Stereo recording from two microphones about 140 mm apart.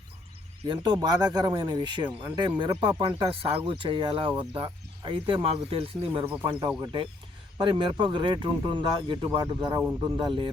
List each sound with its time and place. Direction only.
0.7 s speech: 30° right (ahead or behind)